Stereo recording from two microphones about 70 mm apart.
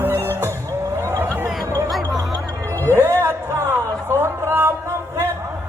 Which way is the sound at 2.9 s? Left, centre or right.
Right.